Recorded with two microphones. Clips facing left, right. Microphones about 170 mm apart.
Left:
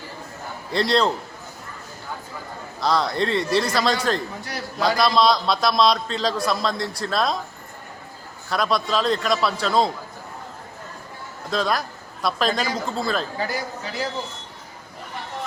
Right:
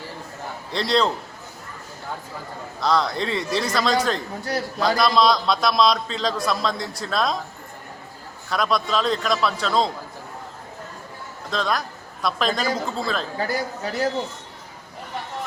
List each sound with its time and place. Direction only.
0.7 s a man's voice: centre (ahead or behind)
2.8 s a man's voice: centre (ahead or behind)
8.4 s a man's voice: centre (ahead or behind)
11.5 s a man's voice: 5° left (ahead or behind)
13.4 s a man's voice: 45° right (ahead or behind)